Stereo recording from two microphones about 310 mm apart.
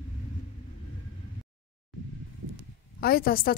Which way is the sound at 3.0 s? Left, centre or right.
Left.